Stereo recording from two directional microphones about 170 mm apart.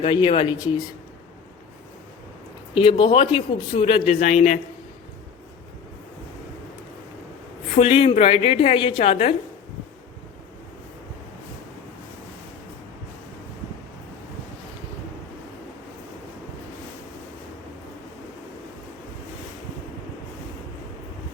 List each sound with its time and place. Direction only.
0.0 s speech: 30° left (ahead or behind)
2.7 s speech: 30° left (ahead or behind)
7.8 s speech: 35° left (ahead or behind)